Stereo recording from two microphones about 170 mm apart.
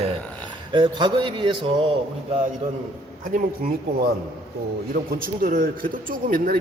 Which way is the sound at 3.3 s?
55° right (ahead or behind).